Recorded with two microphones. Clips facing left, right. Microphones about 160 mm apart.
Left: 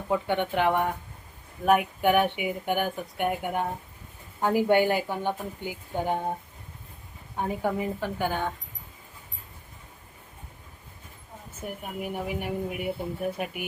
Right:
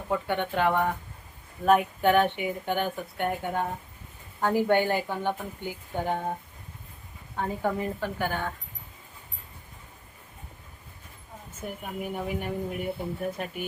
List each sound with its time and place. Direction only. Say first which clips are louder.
0.1 s speech: left 2 dB; 15° left (ahead or behind)
7.3 s speech: left 1 dB; 15° left (ahead or behind)
11.6 s speech: even; 10° left (ahead or behind)